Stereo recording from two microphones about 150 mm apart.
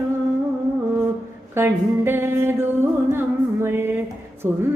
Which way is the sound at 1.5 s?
15° right (ahead or behind).